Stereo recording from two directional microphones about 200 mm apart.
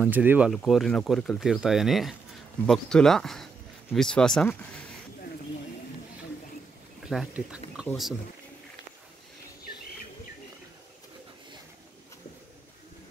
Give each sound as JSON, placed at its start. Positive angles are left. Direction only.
{"t": 0.0, "sound": "speech", "side_deg": -10}
{"t": 7.1, "sound": "speech", "side_deg": -5}